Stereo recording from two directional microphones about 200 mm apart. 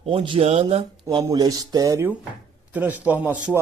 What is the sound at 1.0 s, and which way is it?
A man's voice, 15° right (ahead or behind).